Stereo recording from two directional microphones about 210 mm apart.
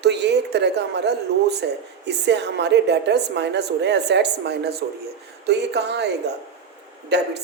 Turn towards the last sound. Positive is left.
turn(degrees=-55)  # may be behind; listen again after turning